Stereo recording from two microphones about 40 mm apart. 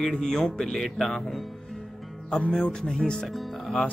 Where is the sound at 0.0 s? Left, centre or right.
Centre.